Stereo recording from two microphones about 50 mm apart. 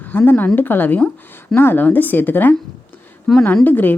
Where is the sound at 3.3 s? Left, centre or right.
Centre.